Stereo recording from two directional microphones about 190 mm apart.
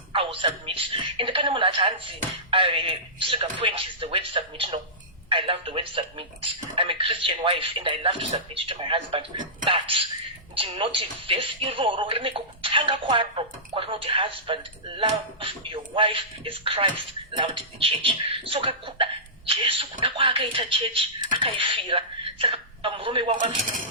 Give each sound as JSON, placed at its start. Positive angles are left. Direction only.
{"t": 0.1, "sound": "speech", "side_deg": -25}
{"t": 23.4, "sound": "speech", "side_deg": -45}